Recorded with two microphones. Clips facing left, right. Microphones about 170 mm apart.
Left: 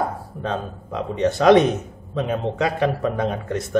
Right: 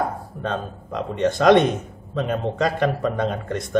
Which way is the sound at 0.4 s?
Centre (ahead or behind).